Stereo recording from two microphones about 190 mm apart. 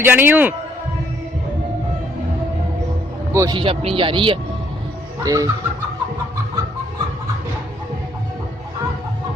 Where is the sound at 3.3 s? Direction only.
15° right (ahead or behind).